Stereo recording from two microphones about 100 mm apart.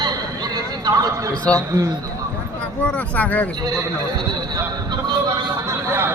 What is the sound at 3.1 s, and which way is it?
Speech, 15° left (ahead or behind).